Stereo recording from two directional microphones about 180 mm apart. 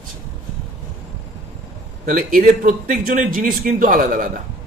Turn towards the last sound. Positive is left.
turn(degrees=-50)  # may be behind; listen again after turning